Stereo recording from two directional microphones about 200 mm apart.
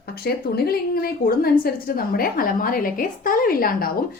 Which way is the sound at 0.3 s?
50° left (ahead or behind).